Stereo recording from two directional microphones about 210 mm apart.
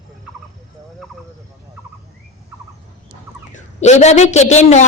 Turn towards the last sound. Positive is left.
turn(degrees=35)  # may be behind; listen again after turning